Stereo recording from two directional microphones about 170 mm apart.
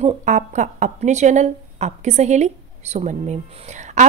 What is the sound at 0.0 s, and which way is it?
Speech, 45° right (ahead or behind).